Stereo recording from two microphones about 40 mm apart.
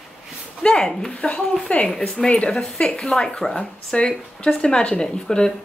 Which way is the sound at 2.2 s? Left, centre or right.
Left.